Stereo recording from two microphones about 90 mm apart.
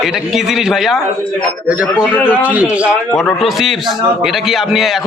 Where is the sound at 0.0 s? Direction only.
5° right (ahead or behind).